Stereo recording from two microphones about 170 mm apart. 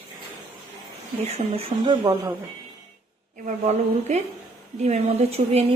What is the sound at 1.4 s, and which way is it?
Speech, 35° right (ahead or behind).